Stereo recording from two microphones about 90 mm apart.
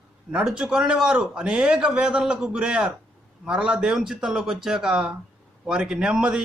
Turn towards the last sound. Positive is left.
turn(degrees=-10)  # may be behind; listen again after turning